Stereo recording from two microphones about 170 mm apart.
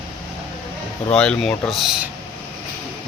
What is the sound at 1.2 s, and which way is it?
Speech, 5° left (ahead or behind).